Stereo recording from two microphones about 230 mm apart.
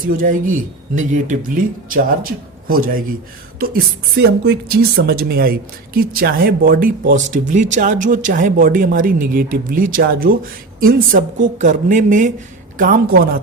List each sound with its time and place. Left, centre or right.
0.1 s speech: right
4.4 s speech: right